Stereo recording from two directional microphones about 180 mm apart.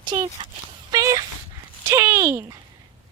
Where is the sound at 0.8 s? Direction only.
20° right (ahead or behind).